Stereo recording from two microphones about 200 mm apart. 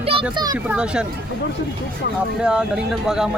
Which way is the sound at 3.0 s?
5° right (ahead or behind).